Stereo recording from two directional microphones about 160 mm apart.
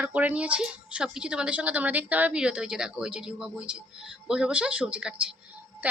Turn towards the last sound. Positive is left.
turn(degrees=-10)  # may be behind; listen again after turning